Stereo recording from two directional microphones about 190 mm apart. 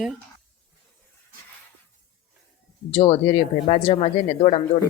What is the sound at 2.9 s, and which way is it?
Speech, 30° left (ahead or behind).